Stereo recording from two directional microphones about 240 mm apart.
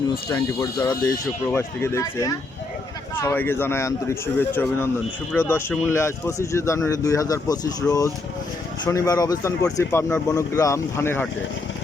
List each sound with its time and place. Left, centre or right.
0.3 s speech: centre